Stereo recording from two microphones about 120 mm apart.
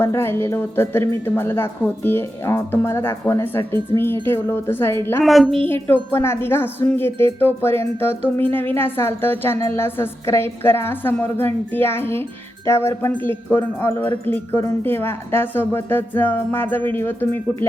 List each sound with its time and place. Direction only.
0.0 s speech: 20° left (ahead or behind)
5.2 s speech: centre (ahead or behind)
5.6 s speech: 15° left (ahead or behind)